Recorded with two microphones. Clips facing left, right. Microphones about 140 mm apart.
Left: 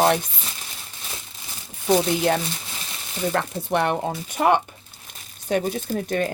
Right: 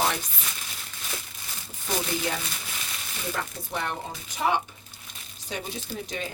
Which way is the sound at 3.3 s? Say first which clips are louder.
Left 9 dB; 65° left (ahead or behind).